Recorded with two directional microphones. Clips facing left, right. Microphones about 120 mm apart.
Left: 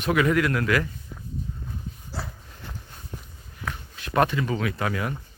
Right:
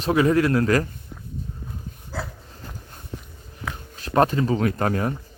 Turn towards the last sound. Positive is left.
turn(degrees=-40)  # may be behind; listen again after turning